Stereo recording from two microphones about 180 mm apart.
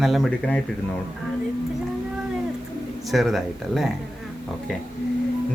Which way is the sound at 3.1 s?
Centre (ahead or behind).